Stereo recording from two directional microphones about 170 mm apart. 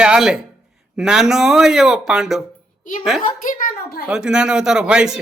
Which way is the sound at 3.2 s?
55° left (ahead or behind).